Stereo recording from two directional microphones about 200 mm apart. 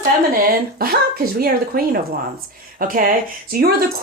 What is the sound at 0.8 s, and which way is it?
Speech, 50° right (ahead or behind).